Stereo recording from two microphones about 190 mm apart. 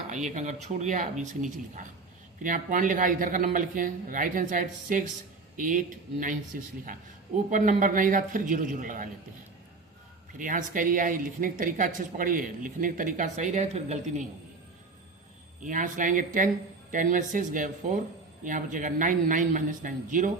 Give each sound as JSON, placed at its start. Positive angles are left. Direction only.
{"t": 0.1, "sound": "speech", "side_deg": -40}
{"t": 10.3, "sound": "speech", "side_deg": -45}
{"t": 15.6, "sound": "speech", "side_deg": -45}